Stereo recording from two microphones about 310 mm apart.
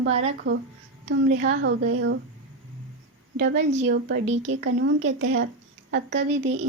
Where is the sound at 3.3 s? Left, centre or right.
Right.